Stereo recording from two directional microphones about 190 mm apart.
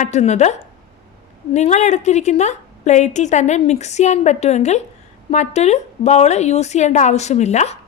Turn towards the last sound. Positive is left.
turn(degrees=35)  # may be behind; listen again after turning